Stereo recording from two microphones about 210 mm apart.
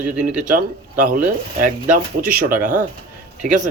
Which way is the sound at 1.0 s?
40° right (ahead or behind).